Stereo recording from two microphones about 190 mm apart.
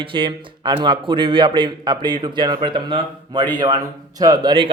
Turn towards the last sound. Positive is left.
turn(degrees=-25)  # may be behind; listen again after turning